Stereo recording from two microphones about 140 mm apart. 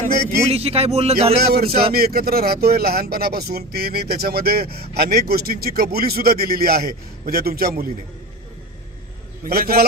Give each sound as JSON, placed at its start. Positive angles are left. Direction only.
{"t": 0.4, "sound": "speech", "side_deg": -45}
{"t": 1.4, "sound": "speech", "side_deg": -90}
{"t": 9.4, "sound": "speech", "side_deg": -90}